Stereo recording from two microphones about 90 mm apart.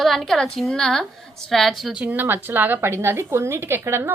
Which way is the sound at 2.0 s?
20° right (ahead or behind).